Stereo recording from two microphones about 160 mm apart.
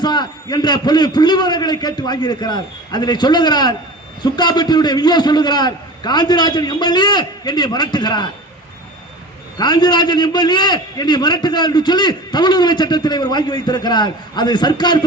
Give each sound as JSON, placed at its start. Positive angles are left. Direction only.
{"t": 0.0, "sound": "a man's voice", "side_deg": 25}
{"t": 9.6, "sound": "a man's voice", "side_deg": 25}